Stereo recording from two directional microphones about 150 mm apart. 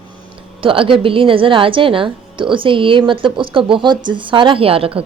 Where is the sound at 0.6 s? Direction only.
35° right (ahead or behind).